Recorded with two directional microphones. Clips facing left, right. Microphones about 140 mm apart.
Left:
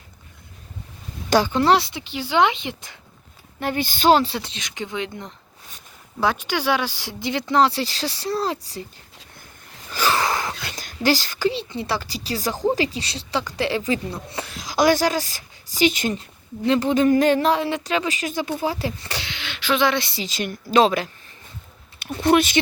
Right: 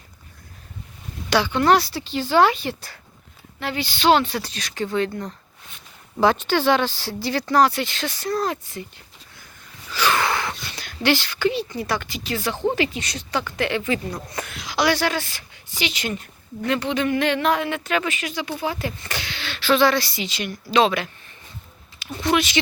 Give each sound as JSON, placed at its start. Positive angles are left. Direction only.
{"t": 1.3, "sound": "speech", "side_deg": 40}
{"t": 1.6, "sound": "speech", "side_deg": 25}
{"t": 3.6, "sound": "speech", "side_deg": 45}
{"t": 4.4, "sound": "speech", "side_deg": 20}
{"t": 9.9, "sound": "whispering", "side_deg": 40}
{"t": 12.8, "sound": "speech", "side_deg": 35}
{"t": 14.8, "sound": "speech", "side_deg": 45}
{"t": 19.3, "sound": "speech", "side_deg": 15}
{"t": 20.1, "sound": "speech", "side_deg": 40}